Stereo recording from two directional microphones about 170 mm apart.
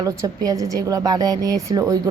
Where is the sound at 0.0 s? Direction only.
20° right (ahead or behind).